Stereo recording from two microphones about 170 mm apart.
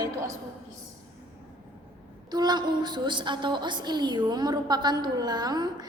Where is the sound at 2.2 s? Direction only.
25° right (ahead or behind).